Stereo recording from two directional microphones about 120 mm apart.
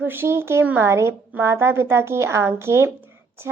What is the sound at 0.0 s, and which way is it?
A woman's voice, 20° right (ahead or behind).